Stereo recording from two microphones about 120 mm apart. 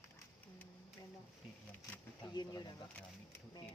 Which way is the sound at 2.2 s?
35° left (ahead or behind).